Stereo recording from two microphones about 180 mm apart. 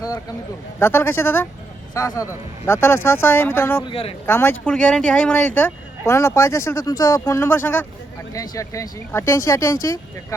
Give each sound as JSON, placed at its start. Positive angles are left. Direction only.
{"t": 0.8, "sound": "speech", "side_deg": 15}
{"t": 3.8, "sound": "speech", "side_deg": 30}
{"t": 4.3, "sound": "speech", "side_deg": 10}